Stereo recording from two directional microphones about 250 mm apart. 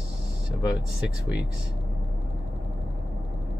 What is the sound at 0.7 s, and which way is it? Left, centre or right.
Speech, centre.